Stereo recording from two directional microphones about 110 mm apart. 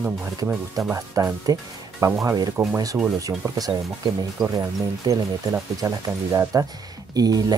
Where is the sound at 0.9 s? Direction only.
30° right (ahead or behind).